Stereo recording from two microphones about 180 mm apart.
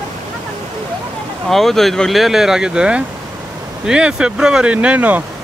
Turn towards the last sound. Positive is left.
turn(degrees=-10)  # may be behind; listen again after turning